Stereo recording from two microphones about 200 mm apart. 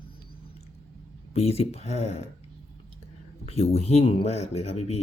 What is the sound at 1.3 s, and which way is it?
Speech, 30° left (ahead or behind).